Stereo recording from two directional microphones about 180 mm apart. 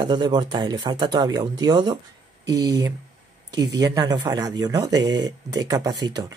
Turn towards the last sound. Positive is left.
turn(degrees=-25)  # may be behind; listen again after turning